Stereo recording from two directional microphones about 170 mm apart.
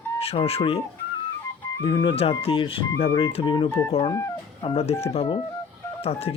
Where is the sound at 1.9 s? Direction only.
25° left (ahead or behind).